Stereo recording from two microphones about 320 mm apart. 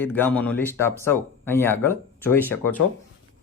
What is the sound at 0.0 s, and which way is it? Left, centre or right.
Speech, centre.